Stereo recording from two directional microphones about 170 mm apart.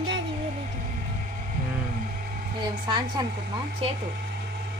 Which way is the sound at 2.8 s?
25° right (ahead or behind).